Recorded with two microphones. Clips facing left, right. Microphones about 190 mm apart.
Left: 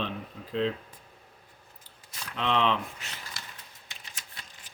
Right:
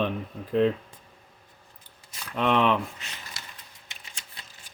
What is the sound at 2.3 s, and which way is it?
Speech, 50° right (ahead or behind).